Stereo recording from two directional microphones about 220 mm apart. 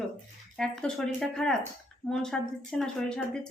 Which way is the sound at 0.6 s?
5° left (ahead or behind).